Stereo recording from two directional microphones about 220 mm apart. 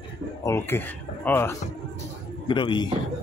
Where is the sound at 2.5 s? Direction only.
20° left (ahead or behind).